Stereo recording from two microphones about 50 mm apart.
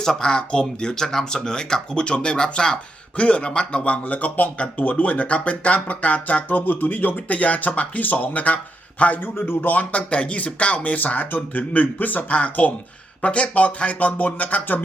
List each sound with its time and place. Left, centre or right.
0.0 s speech: centre; by 9.2 s left
9.2 s speech: left
9.9 s speech: left